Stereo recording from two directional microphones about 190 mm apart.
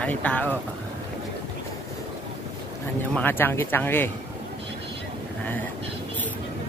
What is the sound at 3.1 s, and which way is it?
Speech, 10° left (ahead or behind).